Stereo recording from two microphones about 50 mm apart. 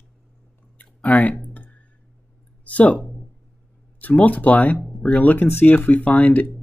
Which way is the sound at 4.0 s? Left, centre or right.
Left.